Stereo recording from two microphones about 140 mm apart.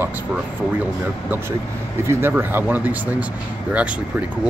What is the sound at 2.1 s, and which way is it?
Speech, 15° right (ahead or behind).